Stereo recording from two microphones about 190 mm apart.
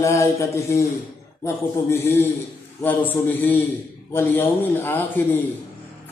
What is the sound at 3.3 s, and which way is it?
A woman's voice, 10° left (ahead or behind).